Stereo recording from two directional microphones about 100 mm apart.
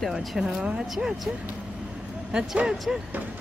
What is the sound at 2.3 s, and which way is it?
Speech, 10° right (ahead or behind).